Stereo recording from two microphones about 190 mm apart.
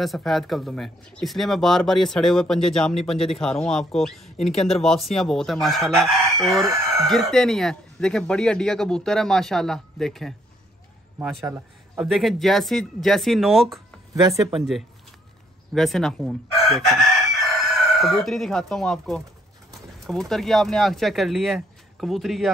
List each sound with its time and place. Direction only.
0.0 s speech: centre (ahead or behind)
14.2 s speech: 20° right (ahead or behind)
14.5 s speech: centre (ahead or behind)